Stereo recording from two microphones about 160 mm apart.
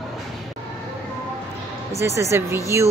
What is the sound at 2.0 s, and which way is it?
Speech, 20° right (ahead or behind).